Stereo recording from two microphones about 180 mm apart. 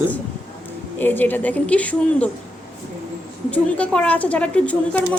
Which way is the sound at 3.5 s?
5° left (ahead or behind).